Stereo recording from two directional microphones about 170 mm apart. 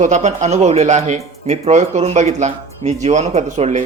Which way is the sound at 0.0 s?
45° right (ahead or behind).